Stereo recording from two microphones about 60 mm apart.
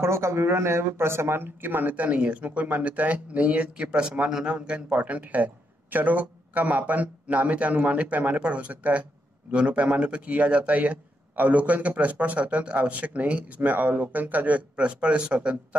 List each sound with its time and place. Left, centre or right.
0.0 s speech: right
14.9 s speech: centre